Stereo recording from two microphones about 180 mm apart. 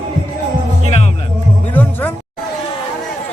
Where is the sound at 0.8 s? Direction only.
35° left (ahead or behind).